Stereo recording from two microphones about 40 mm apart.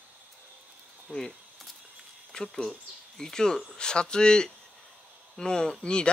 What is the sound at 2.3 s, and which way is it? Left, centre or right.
Speech, centre.